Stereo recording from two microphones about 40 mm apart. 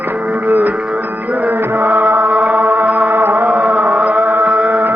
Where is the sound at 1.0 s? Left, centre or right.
Right.